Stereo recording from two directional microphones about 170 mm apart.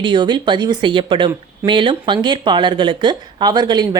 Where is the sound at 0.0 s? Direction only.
25° right (ahead or behind).